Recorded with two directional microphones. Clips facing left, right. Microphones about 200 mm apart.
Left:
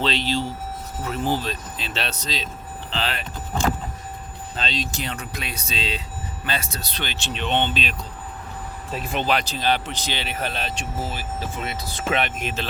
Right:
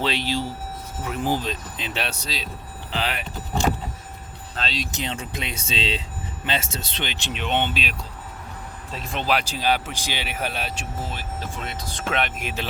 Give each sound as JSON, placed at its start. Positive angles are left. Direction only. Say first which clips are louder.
{"t": 0.0, "sound": "speech", "louder": "left 1 dB", "side_deg": -10}
{"t": 4.5, "sound": "speech", "louder": "left 1 dB", "side_deg": 0}
{"t": 4.8, "sound": "speech", "louder": "even", "side_deg": -20}
{"t": 9.2, "sound": "speech", "louder": "right 1 dB", "side_deg": -10}
{"t": 11.0, "sound": "speech", "louder": "left 2 dB", "side_deg": 5}